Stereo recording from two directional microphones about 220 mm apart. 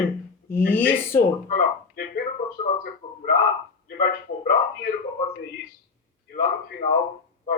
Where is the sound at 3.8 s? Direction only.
40° left (ahead or behind).